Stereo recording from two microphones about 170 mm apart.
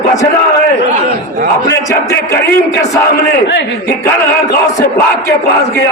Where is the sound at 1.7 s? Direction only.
15° left (ahead or behind).